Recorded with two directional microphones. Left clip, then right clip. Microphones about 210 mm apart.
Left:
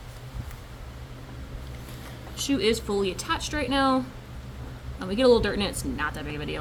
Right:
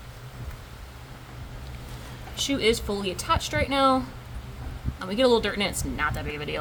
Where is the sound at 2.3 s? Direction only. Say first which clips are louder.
Right 1 dB; 30° right (ahead or behind).